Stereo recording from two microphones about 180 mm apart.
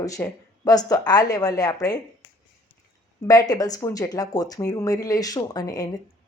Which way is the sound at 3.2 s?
20° left (ahead or behind).